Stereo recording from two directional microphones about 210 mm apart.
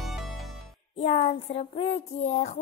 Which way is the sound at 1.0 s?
30° left (ahead or behind).